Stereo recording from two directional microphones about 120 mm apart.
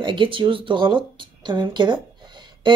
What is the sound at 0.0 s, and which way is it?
Speech, 45° right (ahead or behind).